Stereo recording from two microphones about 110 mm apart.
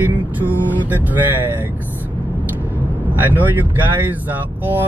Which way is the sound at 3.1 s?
15° right (ahead or behind).